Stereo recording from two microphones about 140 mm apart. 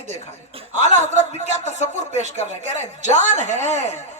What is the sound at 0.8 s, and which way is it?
Speech, 55° right (ahead or behind).